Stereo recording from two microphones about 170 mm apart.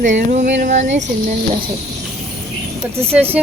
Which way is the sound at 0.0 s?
45° right (ahead or behind).